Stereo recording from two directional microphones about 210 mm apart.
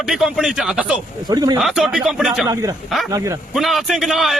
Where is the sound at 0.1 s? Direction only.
Centre (ahead or behind).